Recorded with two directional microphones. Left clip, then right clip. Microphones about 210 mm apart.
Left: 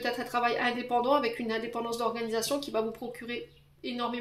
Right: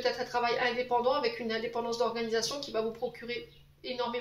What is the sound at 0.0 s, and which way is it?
Speech, 50° left (ahead or behind).